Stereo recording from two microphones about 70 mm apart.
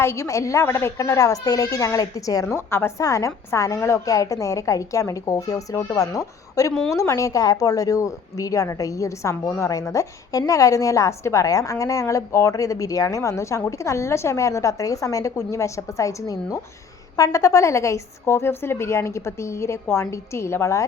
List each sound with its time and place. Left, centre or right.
0.0 s a woman's voice: left
2.6 s a woman's voice: left
3.0 s a woman's voice: left